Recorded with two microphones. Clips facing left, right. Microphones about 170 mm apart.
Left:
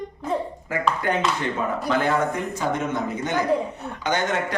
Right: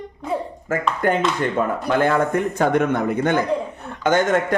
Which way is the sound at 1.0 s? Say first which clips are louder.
Right 4 dB; 50° right (ahead or behind).